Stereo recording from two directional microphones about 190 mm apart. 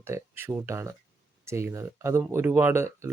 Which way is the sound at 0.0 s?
10° right (ahead or behind).